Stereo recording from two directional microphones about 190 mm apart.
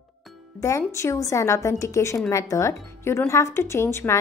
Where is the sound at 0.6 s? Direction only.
15° left (ahead or behind).